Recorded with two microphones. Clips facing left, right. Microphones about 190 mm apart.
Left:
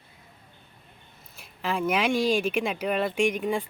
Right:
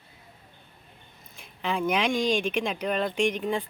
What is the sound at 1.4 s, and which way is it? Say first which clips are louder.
Speech: even; 5° left (ahead or behind).